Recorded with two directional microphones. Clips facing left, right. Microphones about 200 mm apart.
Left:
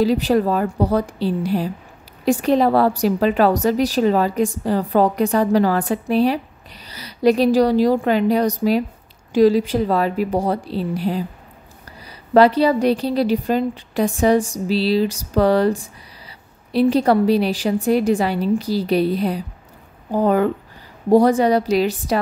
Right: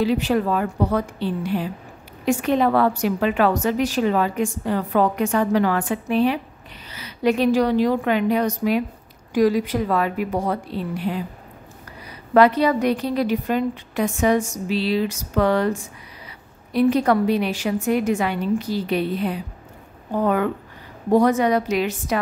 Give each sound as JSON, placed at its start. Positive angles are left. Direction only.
{"t": 0.0, "sound": "a woman's voice", "side_deg": 40}
{"t": 12.4, "sound": "a woman's voice", "side_deg": 30}